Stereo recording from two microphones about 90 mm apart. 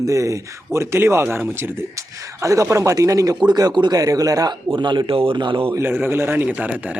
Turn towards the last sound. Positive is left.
turn(degrees=-15)  # may be behind; listen again after turning